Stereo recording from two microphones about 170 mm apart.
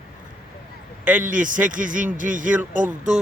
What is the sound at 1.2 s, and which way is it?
Speech, 50° right (ahead or behind).